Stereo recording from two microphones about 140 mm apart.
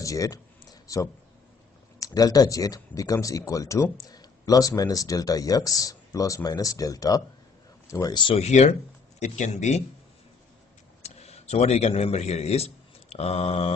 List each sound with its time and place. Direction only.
0.0 s a sound: 25° left (ahead or behind)
2.0 s speech: 25° left (ahead or behind)
8.4 s speech: 50° left (ahead or behind)
11.0 s speech: 50° left (ahead or behind)